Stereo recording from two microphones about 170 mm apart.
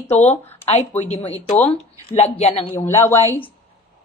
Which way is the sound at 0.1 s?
40° left (ahead or behind).